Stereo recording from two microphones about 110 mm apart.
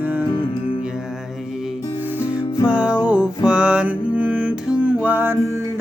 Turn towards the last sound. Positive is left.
turn(degrees=-20)  # may be behind; listen again after turning